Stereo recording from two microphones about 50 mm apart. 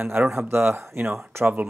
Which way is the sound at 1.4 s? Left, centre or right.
Right.